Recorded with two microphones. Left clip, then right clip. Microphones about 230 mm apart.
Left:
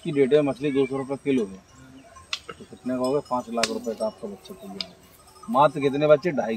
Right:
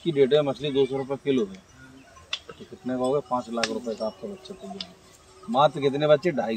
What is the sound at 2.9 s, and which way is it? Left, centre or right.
Speech, centre.